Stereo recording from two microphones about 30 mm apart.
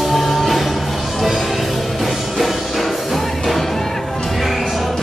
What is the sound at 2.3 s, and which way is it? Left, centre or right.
Music, centre.